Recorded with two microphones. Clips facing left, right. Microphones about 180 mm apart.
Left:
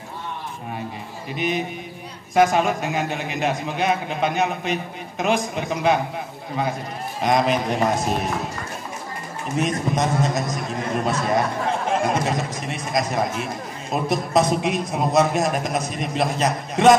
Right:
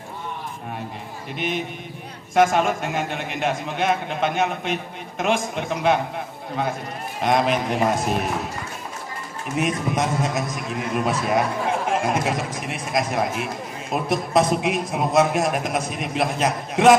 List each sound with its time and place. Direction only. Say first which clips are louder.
1.3 s a man's voice: left 2 dB; centre (ahead or behind)
7.2 s a man's voice: even; centre (ahead or behind)
9.6 s a man's voice: left 1 dB; 5° right (ahead or behind)
10.5 s a man's voice: left 1 dB; 40° left (ahead or behind)
11.1 s a man's voice: even; 5° right (ahead or behind)